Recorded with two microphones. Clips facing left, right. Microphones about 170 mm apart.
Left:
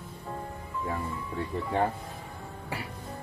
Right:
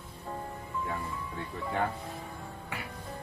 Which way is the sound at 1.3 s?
30° left (ahead or behind).